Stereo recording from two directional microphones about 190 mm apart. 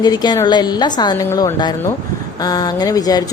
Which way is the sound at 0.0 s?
20° left (ahead or behind).